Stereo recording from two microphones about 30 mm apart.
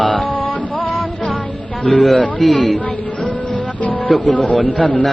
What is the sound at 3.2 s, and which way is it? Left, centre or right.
Music, left.